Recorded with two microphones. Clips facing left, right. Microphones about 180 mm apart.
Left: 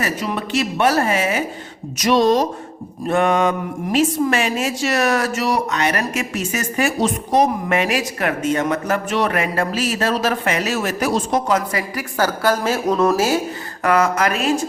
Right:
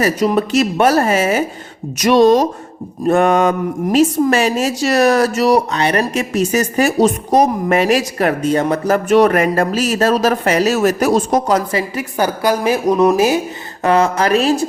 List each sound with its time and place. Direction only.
0.0 s speech: 40° right (ahead or behind)
2.0 s speech: 55° right (ahead or behind); by 14.7 s 35° right (ahead or behind)